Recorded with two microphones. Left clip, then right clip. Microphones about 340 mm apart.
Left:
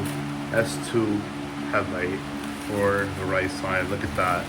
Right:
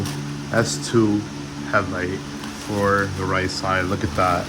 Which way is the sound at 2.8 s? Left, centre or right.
Centre.